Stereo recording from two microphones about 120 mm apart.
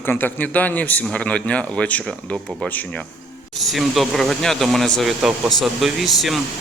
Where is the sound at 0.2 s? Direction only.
15° left (ahead or behind).